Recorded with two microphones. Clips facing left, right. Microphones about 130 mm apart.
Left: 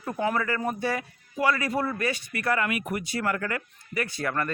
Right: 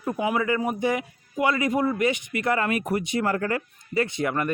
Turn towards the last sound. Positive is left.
turn(degrees=-20)  # may be behind; listen again after turning